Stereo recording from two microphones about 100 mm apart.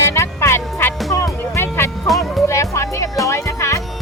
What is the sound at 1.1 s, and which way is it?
Speech, 35° left (ahead or behind).